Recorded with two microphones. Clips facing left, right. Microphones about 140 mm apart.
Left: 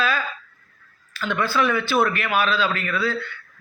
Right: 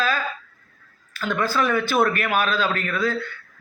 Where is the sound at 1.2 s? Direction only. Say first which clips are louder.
Even; 45° right (ahead or behind).